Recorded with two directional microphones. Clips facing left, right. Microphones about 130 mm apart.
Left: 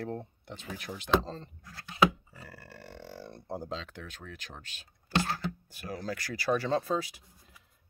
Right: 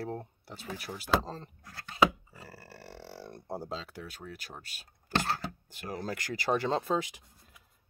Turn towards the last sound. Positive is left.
turn(degrees=-20)  # may be behind; listen again after turning